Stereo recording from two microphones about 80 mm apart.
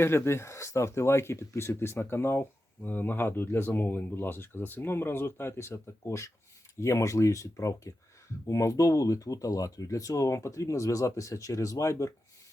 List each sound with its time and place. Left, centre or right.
0.0 s speech: left